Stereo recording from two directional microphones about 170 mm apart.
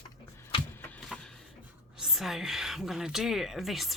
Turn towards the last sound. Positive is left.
turn(degrees=0)  # may be behind; listen again after turning